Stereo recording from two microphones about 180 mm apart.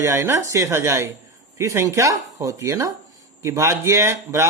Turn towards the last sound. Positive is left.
turn(degrees=-15)  # may be behind; listen again after turning